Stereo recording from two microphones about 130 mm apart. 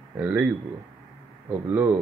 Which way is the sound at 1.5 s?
15° right (ahead or behind).